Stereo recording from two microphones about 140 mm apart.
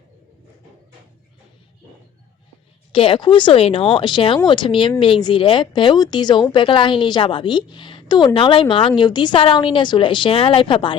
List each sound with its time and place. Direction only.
2.9 s speech: 40° left (ahead or behind)